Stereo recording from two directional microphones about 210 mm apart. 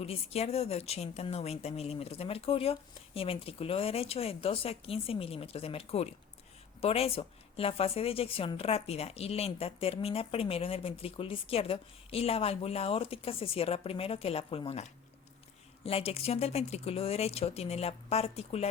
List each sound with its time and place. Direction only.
0.0 s speech: 30° left (ahead or behind)